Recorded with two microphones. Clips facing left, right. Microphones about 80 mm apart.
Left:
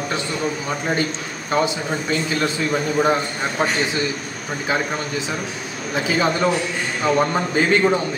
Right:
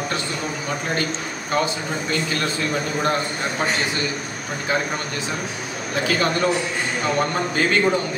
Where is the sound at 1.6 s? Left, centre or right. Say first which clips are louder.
Left 2 dB; centre.